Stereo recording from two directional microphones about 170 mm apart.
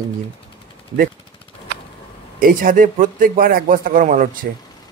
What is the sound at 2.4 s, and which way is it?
A man's voice, 55° right (ahead or behind).